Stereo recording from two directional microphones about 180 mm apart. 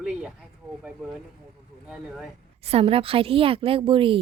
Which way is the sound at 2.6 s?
35° right (ahead or behind).